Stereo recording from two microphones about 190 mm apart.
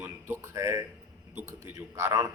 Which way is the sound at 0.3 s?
15° right (ahead or behind).